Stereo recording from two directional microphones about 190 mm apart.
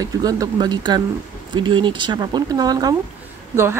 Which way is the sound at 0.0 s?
20° right (ahead or behind).